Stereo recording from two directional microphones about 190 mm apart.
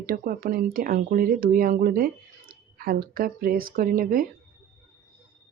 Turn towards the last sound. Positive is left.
turn(degrees=-50)  # may be behind; listen again after turning